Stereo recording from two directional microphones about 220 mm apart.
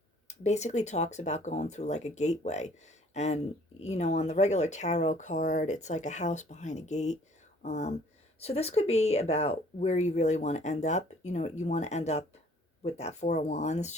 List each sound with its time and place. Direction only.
0.4 s speech: 30° left (ahead or behind)